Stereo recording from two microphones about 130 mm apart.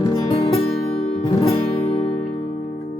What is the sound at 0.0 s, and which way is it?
Music, 30° left (ahead or behind).